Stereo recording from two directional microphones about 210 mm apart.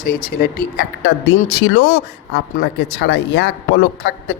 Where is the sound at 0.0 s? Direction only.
45° left (ahead or behind).